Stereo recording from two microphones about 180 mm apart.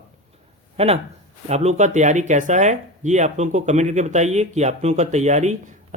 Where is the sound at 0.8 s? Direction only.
35° right (ahead or behind).